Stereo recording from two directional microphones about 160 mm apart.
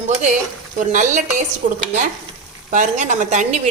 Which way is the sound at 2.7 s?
50° right (ahead or behind).